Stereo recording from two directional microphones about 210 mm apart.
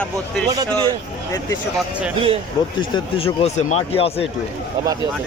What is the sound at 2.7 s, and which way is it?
Speech, 25° left (ahead or behind).